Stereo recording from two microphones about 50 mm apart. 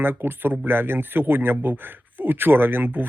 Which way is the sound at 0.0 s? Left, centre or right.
Right.